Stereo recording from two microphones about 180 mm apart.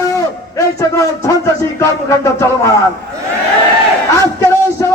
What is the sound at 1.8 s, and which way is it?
Speech, 15° left (ahead or behind).